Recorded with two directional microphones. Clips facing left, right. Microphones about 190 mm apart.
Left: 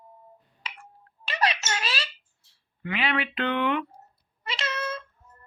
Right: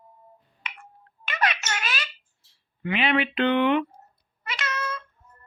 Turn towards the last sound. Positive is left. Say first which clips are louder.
# even
turn(degrees=25)  # may be behind; listen again after turning